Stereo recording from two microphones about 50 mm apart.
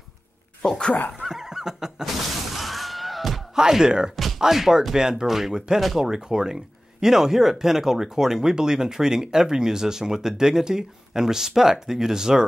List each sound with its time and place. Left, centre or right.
0.7 s speech: centre
1.2 s neigh: centre
2.5 s a sound: centre
3.5 s speech: centre
6.0 s speech: centre